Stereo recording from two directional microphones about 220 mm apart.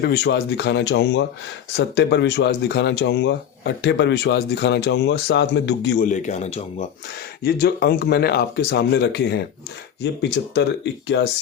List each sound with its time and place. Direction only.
0.0 s speech: 50° left (ahead or behind); by 6.8 s 30° left (ahead or behind)
7.4 s speech: 45° left (ahead or behind)